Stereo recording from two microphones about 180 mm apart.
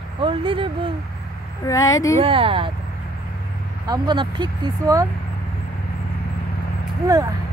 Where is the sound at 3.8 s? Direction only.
25° right (ahead or behind).